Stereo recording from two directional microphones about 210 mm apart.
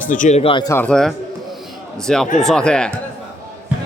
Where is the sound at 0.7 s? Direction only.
5° left (ahead or behind).